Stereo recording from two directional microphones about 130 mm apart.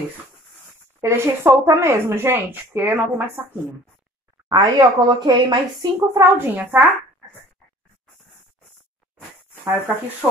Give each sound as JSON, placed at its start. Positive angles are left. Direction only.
{"t": 1.0, "sound": "speech", "side_deg": -20}
{"t": 4.5, "sound": "speech", "side_deg": -30}
{"t": 6.4, "sound": "speech", "side_deg": -15}
{"t": 9.7, "sound": "speech", "side_deg": -15}